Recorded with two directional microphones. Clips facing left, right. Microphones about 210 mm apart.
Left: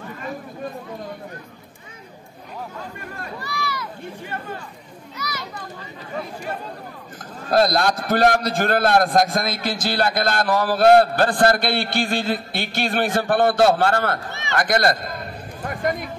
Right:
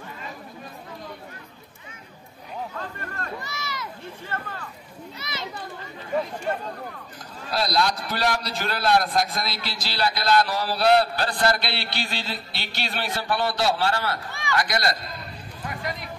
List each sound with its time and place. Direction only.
3.4 s a sound: 20° right (ahead or behind)
4.3 s speech: 15° left (ahead or behind)
5.1 s children playing: 25° right (ahead or behind)
7.4 s a man's voice: 50° left (ahead or behind)